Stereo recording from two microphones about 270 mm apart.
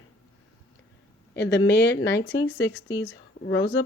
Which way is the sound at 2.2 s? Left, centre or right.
Centre.